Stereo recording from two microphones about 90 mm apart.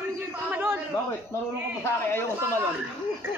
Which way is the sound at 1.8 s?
25° left (ahead or behind).